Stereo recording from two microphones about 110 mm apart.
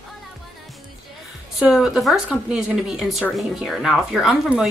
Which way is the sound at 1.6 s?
5° right (ahead or behind).